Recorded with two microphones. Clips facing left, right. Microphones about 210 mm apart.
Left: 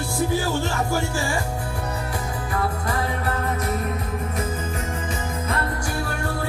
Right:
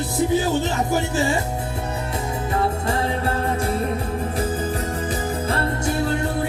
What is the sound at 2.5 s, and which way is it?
Music, 25° right (ahead or behind).